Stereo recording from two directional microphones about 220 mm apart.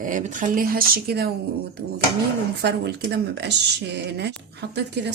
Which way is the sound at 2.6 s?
50° right (ahead or behind).